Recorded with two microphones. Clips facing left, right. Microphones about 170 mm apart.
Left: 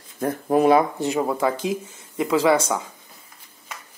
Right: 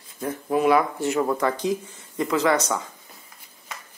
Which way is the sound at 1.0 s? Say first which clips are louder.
Left 1 dB; 15° left (ahead or behind).